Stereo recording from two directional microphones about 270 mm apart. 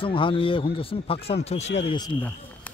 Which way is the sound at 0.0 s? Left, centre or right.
Centre.